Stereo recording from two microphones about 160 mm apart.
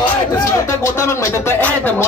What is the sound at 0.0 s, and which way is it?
Speech, 20° left (ahead or behind).